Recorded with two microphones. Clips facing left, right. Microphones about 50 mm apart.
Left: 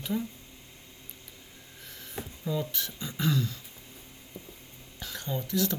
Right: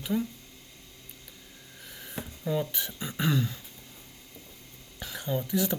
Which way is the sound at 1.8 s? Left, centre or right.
Centre.